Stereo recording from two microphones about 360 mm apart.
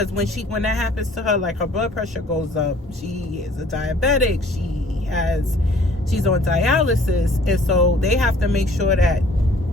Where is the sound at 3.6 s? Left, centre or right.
Centre.